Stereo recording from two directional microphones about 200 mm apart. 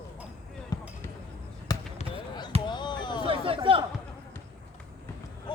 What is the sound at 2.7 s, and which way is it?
Music, 20° left (ahead or behind).